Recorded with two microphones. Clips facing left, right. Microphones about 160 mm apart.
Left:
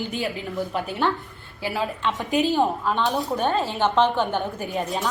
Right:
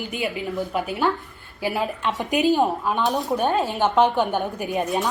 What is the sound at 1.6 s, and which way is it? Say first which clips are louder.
A woman's voice: right 2 dB; 15° right (ahead or behind).